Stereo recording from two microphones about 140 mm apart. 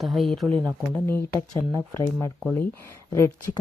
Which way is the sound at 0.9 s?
15° left (ahead or behind).